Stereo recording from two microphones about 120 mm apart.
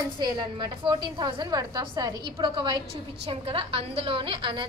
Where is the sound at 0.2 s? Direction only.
40° right (ahead or behind).